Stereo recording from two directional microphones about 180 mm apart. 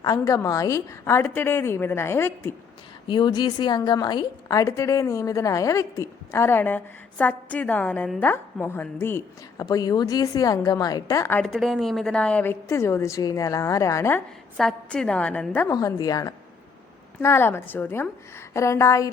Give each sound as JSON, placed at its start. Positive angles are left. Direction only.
{"t": 0.0, "sound": "a woman's voice", "side_deg": 20}
{"t": 3.1, "sound": "a woman's voice", "side_deg": 25}
{"t": 14.5, "sound": "a woman's voice", "side_deg": 0}
{"t": 15.7, "sound": "a woman's voice", "side_deg": 20}